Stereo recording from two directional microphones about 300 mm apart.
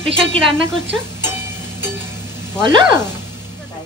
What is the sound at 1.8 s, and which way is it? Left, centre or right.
Music, centre.